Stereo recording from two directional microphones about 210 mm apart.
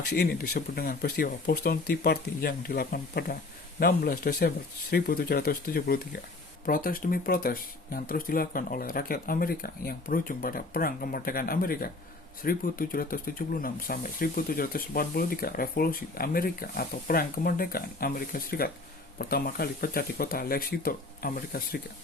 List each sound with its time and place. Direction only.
0.1 s speech: 50° left (ahead or behind)